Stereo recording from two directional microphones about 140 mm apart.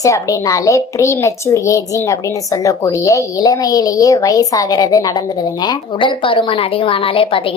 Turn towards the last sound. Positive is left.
turn(degrees=40)  # may be behind; listen again after turning